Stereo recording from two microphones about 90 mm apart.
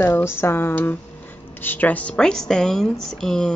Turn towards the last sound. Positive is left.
turn(degrees=5)  # may be behind; listen again after turning